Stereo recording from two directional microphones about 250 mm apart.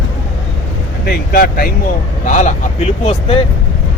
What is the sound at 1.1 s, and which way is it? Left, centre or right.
Speech, left.